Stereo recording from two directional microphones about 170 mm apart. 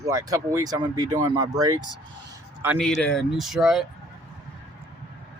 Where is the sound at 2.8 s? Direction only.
5° left (ahead or behind).